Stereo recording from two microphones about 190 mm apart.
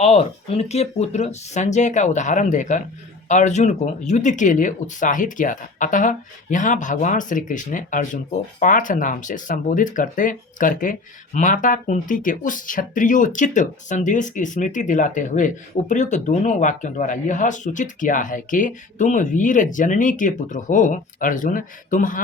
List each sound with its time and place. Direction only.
0.0 s speech: 35° left (ahead or behind)